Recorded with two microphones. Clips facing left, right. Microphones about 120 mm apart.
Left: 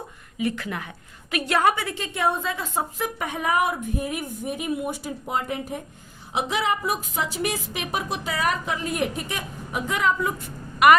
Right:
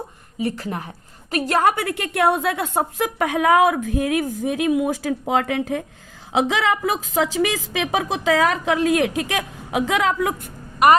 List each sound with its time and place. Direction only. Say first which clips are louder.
0.3 s a woman's voice: right 2 dB; 35° right (ahead or behind)
1.7 s a woman's voice: right 6 dB; 60° right (ahead or behind); by 10.3 s 90° right
10.8 s a woman's voice: right 1 dB; 35° right (ahead or behind)